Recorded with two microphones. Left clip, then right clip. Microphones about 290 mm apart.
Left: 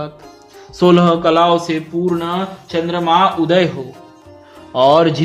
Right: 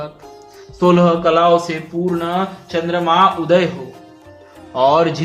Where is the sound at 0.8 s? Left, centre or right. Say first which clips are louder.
Left 1 dB; left.